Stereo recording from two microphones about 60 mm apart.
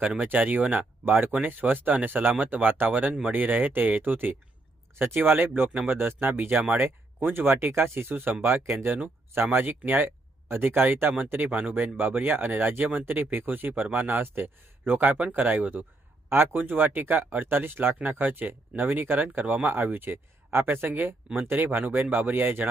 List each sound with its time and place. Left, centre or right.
0.0 s speech: centre
10.5 s speech: right
11.9 s speech: right